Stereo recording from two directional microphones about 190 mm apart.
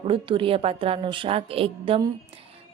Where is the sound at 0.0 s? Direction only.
25° right (ahead or behind).